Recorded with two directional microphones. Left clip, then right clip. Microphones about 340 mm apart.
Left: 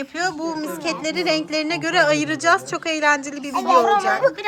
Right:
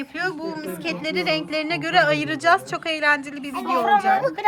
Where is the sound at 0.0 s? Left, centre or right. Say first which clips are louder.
Left 3 dB; centre.